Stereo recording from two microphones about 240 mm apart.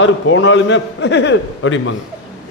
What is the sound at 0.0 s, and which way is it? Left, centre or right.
A man's voice, left.